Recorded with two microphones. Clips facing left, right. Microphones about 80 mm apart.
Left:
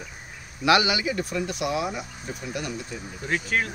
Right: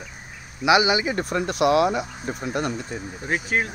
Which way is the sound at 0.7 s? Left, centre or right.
Right.